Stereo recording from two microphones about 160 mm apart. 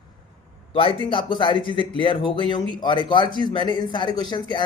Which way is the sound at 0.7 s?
35° left (ahead or behind).